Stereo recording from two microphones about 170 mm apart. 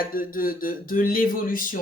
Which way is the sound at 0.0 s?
55° left (ahead or behind).